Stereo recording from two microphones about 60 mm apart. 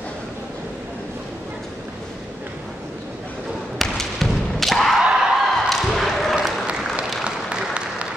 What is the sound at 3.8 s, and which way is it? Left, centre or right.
Thump, centre.